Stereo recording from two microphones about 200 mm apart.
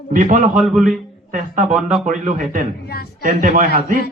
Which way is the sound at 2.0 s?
40° right (ahead or behind).